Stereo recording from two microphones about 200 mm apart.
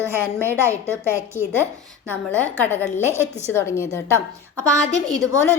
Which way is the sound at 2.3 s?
10° left (ahead or behind).